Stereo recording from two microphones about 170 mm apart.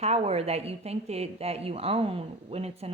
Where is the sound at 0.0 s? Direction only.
35° right (ahead or behind).